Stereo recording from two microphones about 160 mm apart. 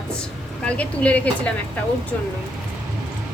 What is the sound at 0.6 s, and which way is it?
Speech, 10° left (ahead or behind).